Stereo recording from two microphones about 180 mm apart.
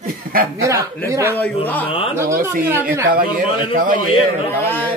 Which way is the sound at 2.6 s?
10° right (ahead or behind).